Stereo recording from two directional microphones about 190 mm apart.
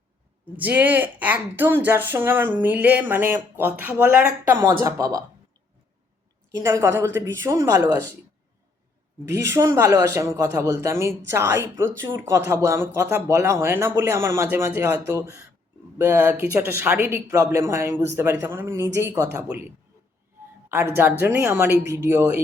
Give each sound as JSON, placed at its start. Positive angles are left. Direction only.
{"t": 0.5, "sound": "speech", "side_deg": -10}
{"t": 6.6, "sound": "speech", "side_deg": -15}
{"t": 9.2, "sound": "speech", "side_deg": -15}
{"t": 20.7, "sound": "speech", "side_deg": -10}